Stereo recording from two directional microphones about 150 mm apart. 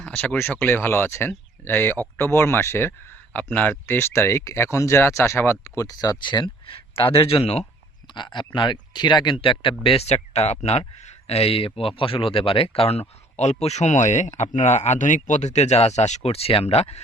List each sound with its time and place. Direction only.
0.0 s speech: 10° left (ahead or behind); by 7.6 s 40° left (ahead or behind)
7.6 s speech: 30° left (ahead or behind)